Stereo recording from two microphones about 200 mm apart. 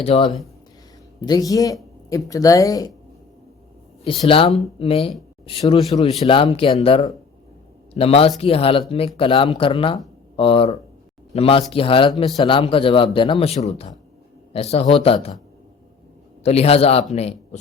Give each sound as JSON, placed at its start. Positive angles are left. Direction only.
{"t": 0.0, "sound": "speech", "side_deg": 25}
{"t": 4.3, "sound": "a man's voice", "side_deg": 25}
{"t": 16.4, "sound": "a man's voice", "side_deg": 30}